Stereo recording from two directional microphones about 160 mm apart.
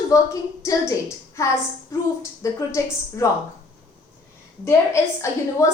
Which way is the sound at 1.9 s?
20° left (ahead or behind).